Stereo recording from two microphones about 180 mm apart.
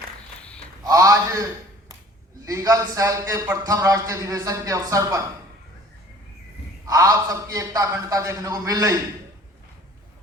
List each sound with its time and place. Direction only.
0.9 s a man's voice: 20° right (ahead or behind)
6.8 s a man's voice: 20° right (ahead or behind)